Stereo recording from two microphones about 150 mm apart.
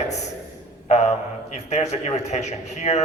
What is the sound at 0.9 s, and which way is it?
Mantra, 50° left (ahead or behind).